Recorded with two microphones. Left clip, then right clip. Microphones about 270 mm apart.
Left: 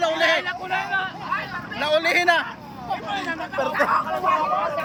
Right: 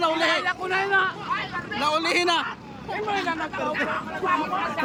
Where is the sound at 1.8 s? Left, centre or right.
Centre.